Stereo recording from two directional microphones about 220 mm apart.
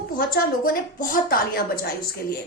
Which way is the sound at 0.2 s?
40° left (ahead or behind).